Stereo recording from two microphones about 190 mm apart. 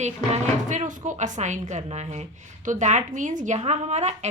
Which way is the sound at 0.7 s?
40° right (ahead or behind).